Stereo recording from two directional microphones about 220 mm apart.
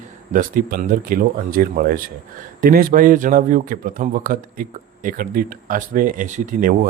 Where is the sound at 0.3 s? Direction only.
40° right (ahead or behind).